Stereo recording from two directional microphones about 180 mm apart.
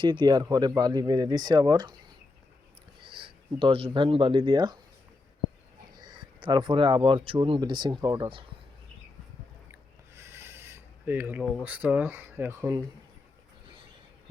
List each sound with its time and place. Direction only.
0.0 s speech: 25° right (ahead or behind)
3.0 s speech: 30° right (ahead or behind)
6.0 s speech: 25° right (ahead or behind)
10.2 s a sound: 15° right (ahead or behind)
11.6 s speech: 10° right (ahead or behind)